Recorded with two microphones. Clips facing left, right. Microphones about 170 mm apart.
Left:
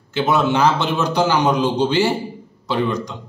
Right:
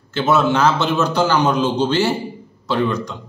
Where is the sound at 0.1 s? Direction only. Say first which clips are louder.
Right 1 dB; 15° left (ahead or behind).